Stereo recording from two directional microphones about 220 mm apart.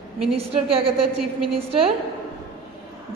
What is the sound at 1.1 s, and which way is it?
Speech, 90° right.